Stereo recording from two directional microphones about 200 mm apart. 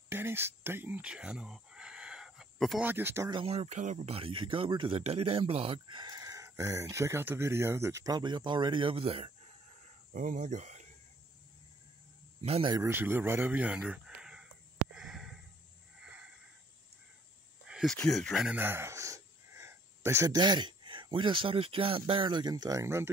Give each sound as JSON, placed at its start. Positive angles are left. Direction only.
{"t": 0.1, "sound": "a sound", "side_deg": -10}
{"t": 2.9, "sound": "speech", "side_deg": -10}
{"t": 3.3, "sound": "speech", "side_deg": -30}
{"t": 10.1, "sound": "speech", "side_deg": -40}
{"t": 12.4, "sound": "speech", "side_deg": -30}
{"t": 12.7, "sound": "speech", "side_deg": -10}
{"t": 15.0, "sound": "a sound", "side_deg": 0}
{"t": 17.6, "sound": "a sound", "side_deg": 0}
{"t": 17.9, "sound": "speech", "side_deg": 5}